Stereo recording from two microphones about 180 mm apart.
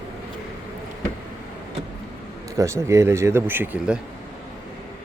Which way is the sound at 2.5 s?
15° right (ahead or behind).